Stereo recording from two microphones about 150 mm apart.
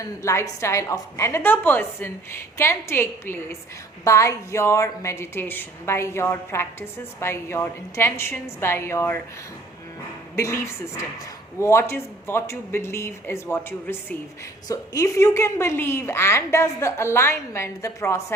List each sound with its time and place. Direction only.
0.0 s a woman's voice: 20° left (ahead or behind)
10.3 s a woman's voice: 20° left (ahead or behind)